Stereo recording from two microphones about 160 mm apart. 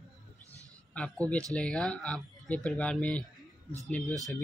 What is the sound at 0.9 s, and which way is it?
Speech, 10° left (ahead or behind).